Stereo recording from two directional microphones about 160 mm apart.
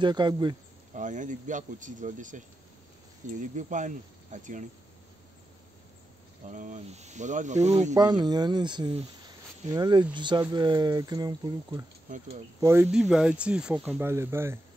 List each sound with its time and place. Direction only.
0.0 s speech: 30° right (ahead or behind)
0.9 s speech: 50° right (ahead or behind)
6.4 s speech: 50° right (ahead or behind)
7.9 s speech: 25° right (ahead or behind)